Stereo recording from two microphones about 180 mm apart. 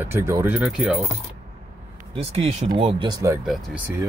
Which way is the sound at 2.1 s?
35° right (ahead or behind).